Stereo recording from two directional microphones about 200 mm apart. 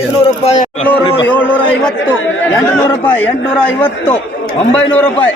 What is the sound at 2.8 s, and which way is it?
Speech, 10° left (ahead or behind).